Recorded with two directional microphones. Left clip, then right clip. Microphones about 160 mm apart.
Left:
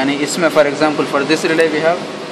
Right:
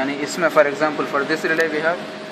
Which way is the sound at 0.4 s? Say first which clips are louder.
Left 3 dB; 10° left (ahead or behind).